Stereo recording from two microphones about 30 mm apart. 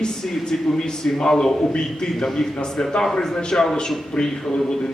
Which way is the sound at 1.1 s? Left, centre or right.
Left.